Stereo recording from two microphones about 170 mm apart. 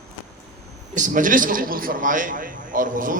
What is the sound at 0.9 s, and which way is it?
A man's voice, 50° right (ahead or behind).